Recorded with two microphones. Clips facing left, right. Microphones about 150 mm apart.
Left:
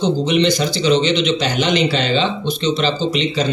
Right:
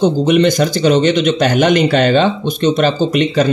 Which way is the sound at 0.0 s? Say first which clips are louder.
Right 5 dB; 50° right (ahead or behind).